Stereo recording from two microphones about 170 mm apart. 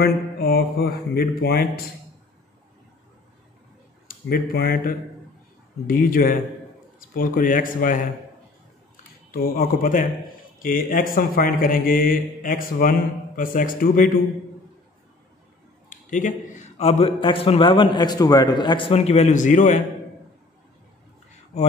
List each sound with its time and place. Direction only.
0.0 s mantra: 65° left (ahead or behind)
4.1 s speech: 60° left (ahead or behind)
9.3 s speech: 60° left (ahead or behind)
15.9 s a man's voice: 50° left (ahead or behind)